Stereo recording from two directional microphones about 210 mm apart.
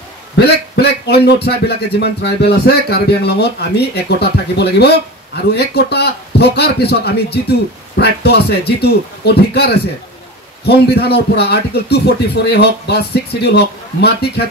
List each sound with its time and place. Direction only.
0.4 s speech: 50° left (ahead or behind)